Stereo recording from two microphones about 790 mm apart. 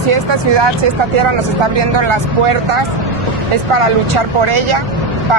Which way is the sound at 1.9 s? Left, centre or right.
Right.